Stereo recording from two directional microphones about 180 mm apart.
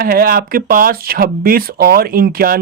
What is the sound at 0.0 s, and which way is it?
Speech, 55° right (ahead or behind).